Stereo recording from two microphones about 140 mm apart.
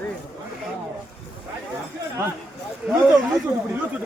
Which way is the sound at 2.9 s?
5° right (ahead or behind).